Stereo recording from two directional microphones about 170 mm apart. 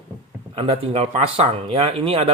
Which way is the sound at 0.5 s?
35° right (ahead or behind).